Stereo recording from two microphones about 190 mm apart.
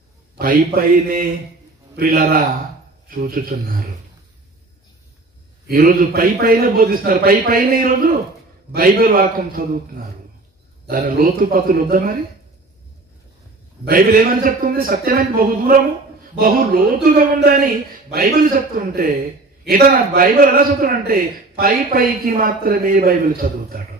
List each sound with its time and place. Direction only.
0.4 s a man's voice: 50° right (ahead or behind)
5.7 s a man's voice: 50° right (ahead or behind)
10.9 s a man's voice: 50° right (ahead or behind)
13.8 s a man's voice: 50° right (ahead or behind)